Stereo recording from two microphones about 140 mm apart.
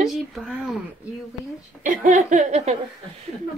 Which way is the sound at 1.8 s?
65° right (ahead or behind).